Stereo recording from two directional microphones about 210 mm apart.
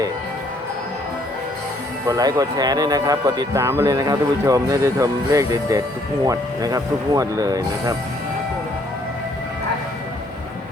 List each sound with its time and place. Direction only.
2.0 s speech: 15° right (ahead or behind)